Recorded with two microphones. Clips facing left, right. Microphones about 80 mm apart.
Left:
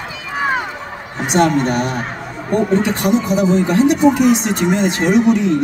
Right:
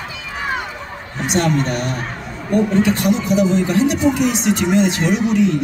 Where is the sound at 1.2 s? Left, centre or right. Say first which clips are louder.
Left 4 dB; left.